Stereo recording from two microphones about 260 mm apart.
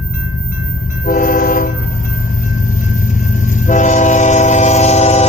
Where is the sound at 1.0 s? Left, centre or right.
Left.